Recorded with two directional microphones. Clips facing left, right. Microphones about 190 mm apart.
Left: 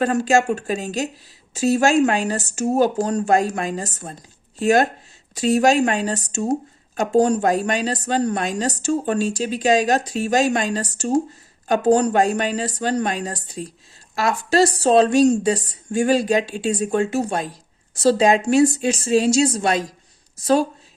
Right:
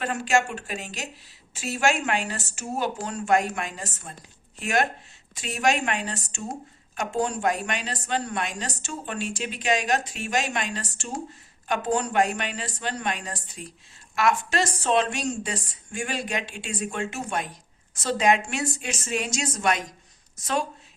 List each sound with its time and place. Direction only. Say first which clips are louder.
0.0 s speech: left 7 dB; 40° left (ahead or behind)